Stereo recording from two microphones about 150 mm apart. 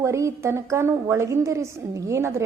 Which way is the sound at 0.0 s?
20° right (ahead or behind).